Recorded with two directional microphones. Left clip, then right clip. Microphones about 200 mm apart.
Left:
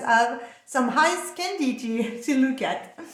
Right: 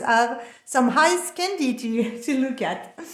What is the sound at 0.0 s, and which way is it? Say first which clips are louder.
A woman's voice: right 1 dB; 40° right (ahead or behind).